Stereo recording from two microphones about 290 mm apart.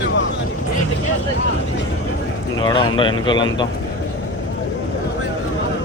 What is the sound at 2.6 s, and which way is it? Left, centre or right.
Speech, centre.